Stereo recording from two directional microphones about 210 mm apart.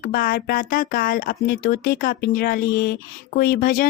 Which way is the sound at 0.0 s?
45° left (ahead or behind).